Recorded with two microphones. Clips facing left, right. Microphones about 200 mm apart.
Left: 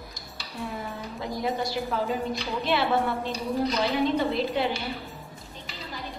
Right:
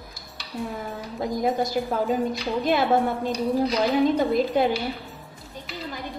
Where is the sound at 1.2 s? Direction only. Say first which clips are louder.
Right 5 dB; 45° right (ahead or behind).